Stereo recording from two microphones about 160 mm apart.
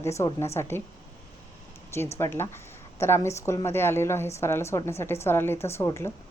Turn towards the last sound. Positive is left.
turn(degrees=15)  # may be behind; listen again after turning